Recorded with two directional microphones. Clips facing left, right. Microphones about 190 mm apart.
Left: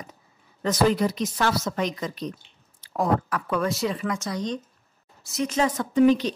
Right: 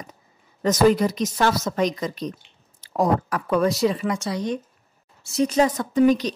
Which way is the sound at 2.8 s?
40° right (ahead or behind).